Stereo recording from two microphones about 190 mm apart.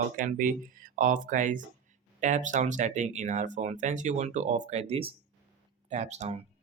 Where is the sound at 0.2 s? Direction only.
45° right (ahead or behind).